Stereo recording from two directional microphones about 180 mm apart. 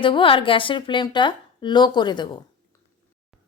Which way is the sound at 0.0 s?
30° left (ahead or behind).